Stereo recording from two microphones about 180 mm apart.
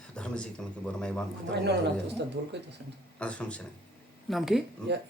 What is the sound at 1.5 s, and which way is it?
Speech, 70° right (ahead or behind).